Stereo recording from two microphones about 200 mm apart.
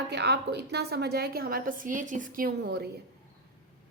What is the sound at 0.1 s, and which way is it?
A woman's voice, 55° right (ahead or behind).